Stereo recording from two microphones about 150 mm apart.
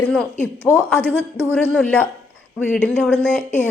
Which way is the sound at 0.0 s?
5° left (ahead or behind).